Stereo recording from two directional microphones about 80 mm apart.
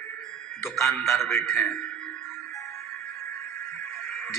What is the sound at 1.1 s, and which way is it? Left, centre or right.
Speech, centre.